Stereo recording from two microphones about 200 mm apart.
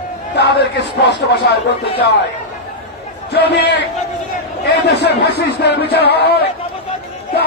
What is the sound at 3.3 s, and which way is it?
Speech, 55° left (ahead or behind).